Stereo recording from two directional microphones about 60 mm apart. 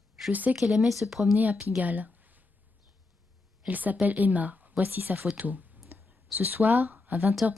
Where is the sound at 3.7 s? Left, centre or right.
Right.